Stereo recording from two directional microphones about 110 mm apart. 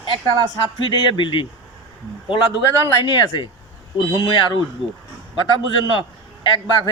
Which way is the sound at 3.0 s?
45° left (ahead or behind).